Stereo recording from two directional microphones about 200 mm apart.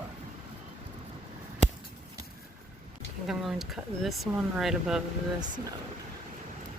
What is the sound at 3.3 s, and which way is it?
Speech, centre (ahead or behind).